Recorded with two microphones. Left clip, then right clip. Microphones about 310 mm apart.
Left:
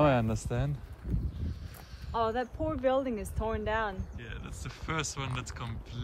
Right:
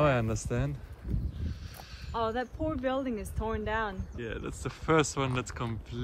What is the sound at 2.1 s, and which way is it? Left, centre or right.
Speech, left.